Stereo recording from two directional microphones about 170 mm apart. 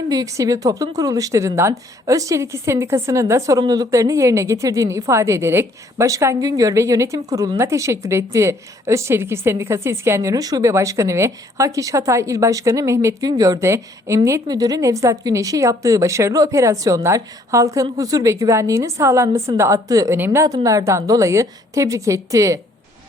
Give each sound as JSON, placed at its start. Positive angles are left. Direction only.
{"t": 0.1, "sound": "a woman's voice", "side_deg": -20}